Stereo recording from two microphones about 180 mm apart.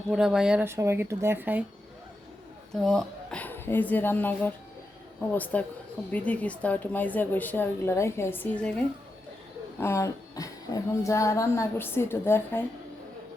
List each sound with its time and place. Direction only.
0.1 s speech: 5° right (ahead or behind)
2.7 s speech: 5° left (ahead or behind)
9.8 s speech: 15° left (ahead or behind)